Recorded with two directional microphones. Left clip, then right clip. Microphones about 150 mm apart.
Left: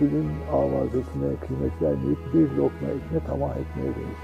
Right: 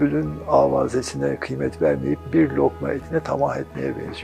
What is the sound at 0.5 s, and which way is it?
Speech, 20° left (ahead or behind).